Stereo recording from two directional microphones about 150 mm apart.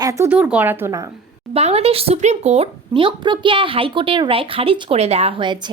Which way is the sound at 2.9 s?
35° right (ahead or behind).